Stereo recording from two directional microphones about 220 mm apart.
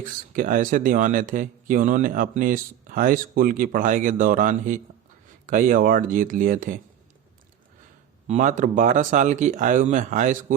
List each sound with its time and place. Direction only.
0.0 s speech: 35° right (ahead or behind)
8.3 s speech: 35° right (ahead or behind)